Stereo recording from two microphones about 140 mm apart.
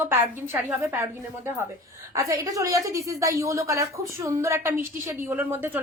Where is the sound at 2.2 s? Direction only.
25° right (ahead or behind).